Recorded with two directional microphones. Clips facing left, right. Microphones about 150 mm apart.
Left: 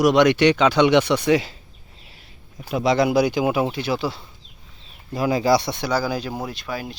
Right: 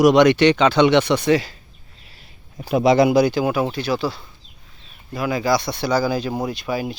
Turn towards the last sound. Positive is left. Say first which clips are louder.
# right 6 dB
turn(degrees=-5)  # may be behind; listen again after turning